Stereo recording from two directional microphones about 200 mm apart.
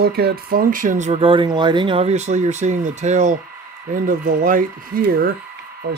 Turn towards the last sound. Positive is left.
turn(degrees=-55)  # may be behind; listen again after turning